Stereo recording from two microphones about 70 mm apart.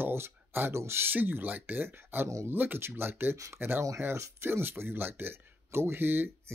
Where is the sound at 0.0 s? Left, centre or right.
Right.